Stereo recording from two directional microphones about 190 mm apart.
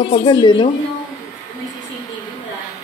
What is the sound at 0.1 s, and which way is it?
Speech, 25° left (ahead or behind).